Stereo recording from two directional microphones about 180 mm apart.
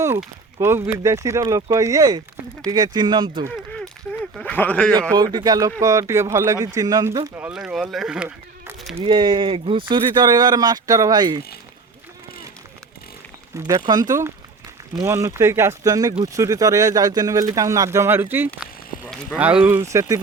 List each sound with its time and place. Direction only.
0.6 s speech: 15° right (ahead or behind)
4.4 s speech: 10° left (ahead or behind)
5.1 s speech: 20° right (ahead or behind); by 9.0 s 5° right (ahead or behind)
9.0 s speech: 25° right (ahead or behind)
13.7 s speech: 20° right (ahead or behind)